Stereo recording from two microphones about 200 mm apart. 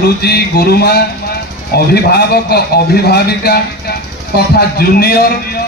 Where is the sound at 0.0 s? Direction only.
50° left (ahead or behind).